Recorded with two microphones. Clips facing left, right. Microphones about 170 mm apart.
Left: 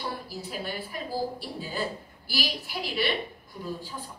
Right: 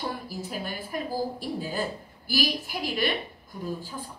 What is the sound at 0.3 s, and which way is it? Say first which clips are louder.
A woman's voice: right 1 dB; 45° right (ahead or behind).